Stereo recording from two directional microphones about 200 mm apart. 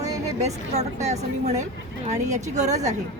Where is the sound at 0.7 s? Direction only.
35° right (ahead or behind).